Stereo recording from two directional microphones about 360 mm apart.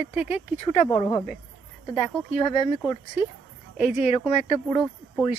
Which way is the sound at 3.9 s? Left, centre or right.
Centre.